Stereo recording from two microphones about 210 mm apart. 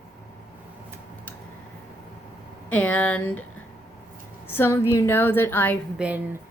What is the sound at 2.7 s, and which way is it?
Speech, 5° left (ahead or behind).